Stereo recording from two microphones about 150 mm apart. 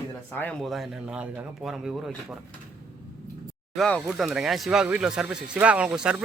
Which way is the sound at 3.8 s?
5° left (ahead or behind).